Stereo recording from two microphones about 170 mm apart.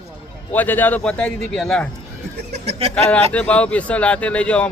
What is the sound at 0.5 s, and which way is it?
Speech, 10° left (ahead or behind).